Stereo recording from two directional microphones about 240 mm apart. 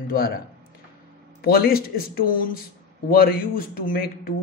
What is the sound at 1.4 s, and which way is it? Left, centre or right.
Speech, left.